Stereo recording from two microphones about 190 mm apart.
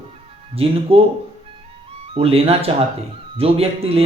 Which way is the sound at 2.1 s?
30° right (ahead or behind).